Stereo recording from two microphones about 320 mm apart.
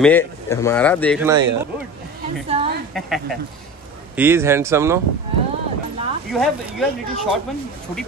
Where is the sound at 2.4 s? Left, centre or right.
Centre.